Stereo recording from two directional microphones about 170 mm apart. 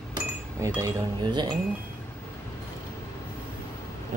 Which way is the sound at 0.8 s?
25° right (ahead or behind).